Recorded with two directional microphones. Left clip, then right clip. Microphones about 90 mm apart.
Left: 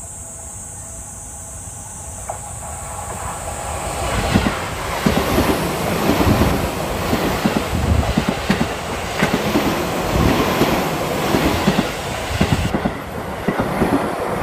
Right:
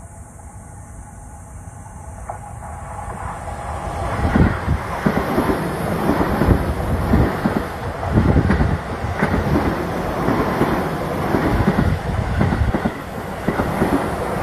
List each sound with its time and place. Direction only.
3.0 s vehicle: 10° left (ahead or behind)
9.8 s train: 15° left (ahead or behind)